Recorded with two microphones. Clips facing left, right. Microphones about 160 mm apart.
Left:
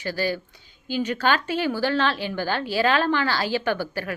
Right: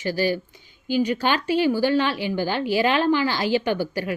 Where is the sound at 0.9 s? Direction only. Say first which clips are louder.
Right 2 dB; 15° right (ahead or behind).